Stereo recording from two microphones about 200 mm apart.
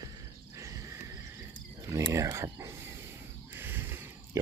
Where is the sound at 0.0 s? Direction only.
15° right (ahead or behind).